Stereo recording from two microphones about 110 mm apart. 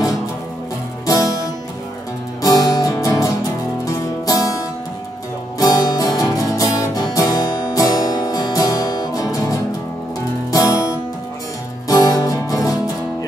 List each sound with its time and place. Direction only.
1.0 s music: 30° left (ahead or behind)
5.6 s music: 35° left (ahead or behind)
11.9 s music: 30° left (ahead or behind)